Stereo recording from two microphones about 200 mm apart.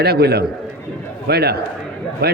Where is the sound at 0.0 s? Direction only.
50° right (ahead or behind).